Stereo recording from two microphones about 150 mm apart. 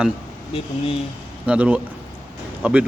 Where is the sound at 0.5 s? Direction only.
40° left (ahead or behind).